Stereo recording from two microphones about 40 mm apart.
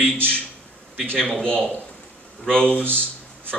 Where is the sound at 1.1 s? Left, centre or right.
Centre.